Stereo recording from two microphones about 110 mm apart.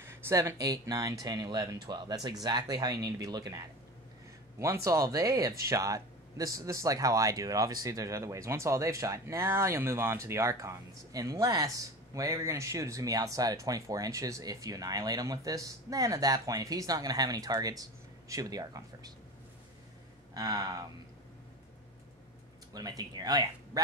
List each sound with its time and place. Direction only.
0.0 s speech: 25° right (ahead or behind)
20.3 s speech: 35° right (ahead or behind)
22.8 s speech: 35° right (ahead or behind)